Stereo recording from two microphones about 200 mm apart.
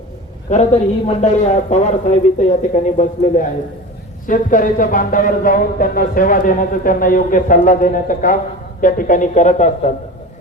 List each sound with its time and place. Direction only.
0.5 s a man's voice: 35° left (ahead or behind)